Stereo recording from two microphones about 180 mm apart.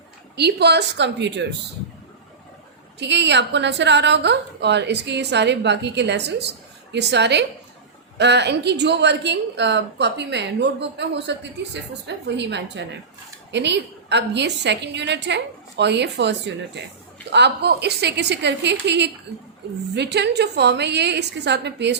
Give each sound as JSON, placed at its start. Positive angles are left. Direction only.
{"t": 0.3, "sound": "a woman's voice", "side_deg": -65}
{"t": 3.0, "sound": "a woman's voice", "side_deg": -75}
{"t": 17.3, "sound": "a woman's voice", "side_deg": -70}